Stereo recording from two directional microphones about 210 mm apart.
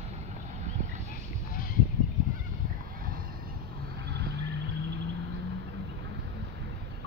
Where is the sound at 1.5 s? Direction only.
45° left (ahead or behind).